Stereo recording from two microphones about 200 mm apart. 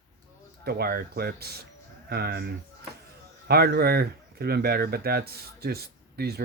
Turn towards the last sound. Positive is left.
turn(degrees=-50)  # may be behind; listen again after turning